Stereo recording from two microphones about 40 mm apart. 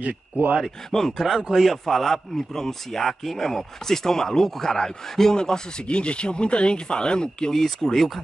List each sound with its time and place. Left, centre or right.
0.0 s speech: right
0.9 s speech: centre
1.2 s speech: centre
1.9 s speech: centre